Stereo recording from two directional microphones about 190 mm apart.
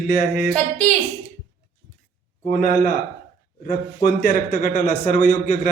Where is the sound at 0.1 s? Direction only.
45° left (ahead or behind).